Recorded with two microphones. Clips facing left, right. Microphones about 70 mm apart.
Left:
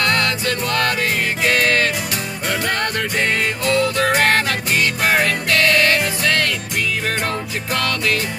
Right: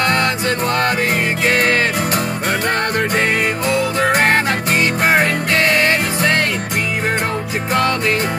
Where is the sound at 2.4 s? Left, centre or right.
Right.